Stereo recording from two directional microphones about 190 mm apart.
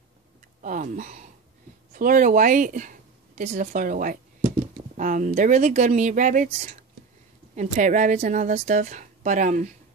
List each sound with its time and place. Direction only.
0.6 s speech: 40° right (ahead or behind)
7.5 s speech: 40° right (ahead or behind)